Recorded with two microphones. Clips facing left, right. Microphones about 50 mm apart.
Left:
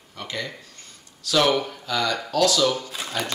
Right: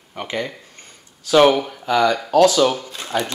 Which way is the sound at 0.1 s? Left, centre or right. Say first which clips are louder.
Right 6 dB; right.